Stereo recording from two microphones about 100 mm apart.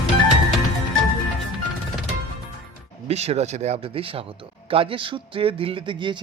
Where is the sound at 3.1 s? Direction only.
90° right.